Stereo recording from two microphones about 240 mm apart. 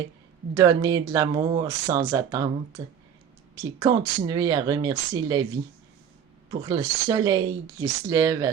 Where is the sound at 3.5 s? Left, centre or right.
Centre.